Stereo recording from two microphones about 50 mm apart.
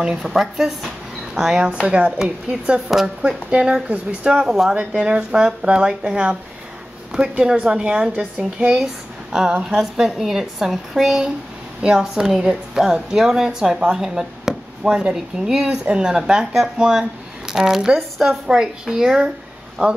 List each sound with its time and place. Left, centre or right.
0.2 s a woman's voice: centre
4.7 s a woman's voice: right
7.1 s a woman's voice: centre
19.8 s a woman's voice: right